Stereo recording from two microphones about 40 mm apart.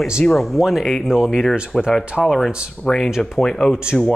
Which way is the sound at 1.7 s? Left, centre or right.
Centre.